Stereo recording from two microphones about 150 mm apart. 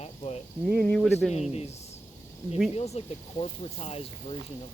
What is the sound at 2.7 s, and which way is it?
Speech, 45° left (ahead or behind).